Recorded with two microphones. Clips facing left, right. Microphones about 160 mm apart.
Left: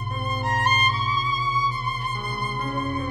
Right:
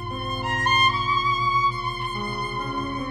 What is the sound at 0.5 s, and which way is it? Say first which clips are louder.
Music: left 1 dB; 35° left (ahead or behind).